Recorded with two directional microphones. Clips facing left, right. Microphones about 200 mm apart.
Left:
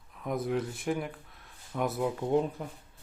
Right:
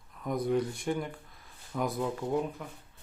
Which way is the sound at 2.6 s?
35° left (ahead or behind).